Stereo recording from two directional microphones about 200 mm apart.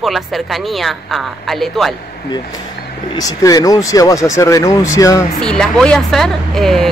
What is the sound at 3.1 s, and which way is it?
Speech, 20° left (ahead or behind).